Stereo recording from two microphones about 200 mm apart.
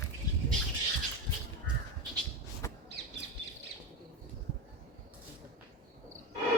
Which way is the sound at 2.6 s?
15° left (ahead or behind).